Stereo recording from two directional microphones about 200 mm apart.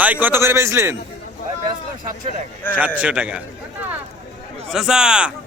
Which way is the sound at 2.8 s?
5° right (ahead or behind).